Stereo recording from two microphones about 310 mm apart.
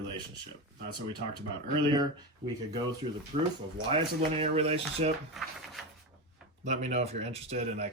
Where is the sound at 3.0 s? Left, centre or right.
Centre.